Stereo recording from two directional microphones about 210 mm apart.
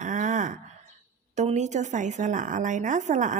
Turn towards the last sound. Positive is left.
turn(degrees=-35)  # may be behind; listen again after turning